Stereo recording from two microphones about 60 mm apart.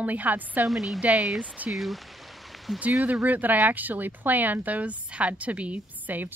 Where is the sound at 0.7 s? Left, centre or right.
Centre.